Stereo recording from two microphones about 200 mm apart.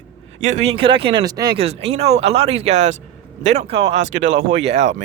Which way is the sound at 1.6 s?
30° right (ahead or behind).